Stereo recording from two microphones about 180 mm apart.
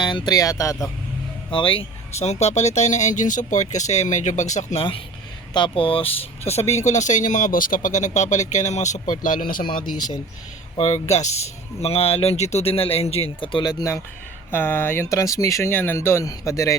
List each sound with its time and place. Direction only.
0.0 s speech: 25° left (ahead or behind)
1.5 s speech: 30° left (ahead or behind); by 9.6 s 50° left (ahead or behind)
10.8 s speech: 35° left (ahead or behind); by 16.7 s 15° left (ahead or behind)